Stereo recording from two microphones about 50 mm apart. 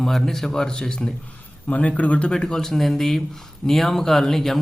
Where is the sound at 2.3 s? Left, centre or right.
Centre.